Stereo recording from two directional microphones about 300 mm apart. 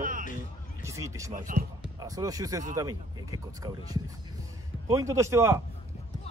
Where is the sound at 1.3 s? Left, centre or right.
Right.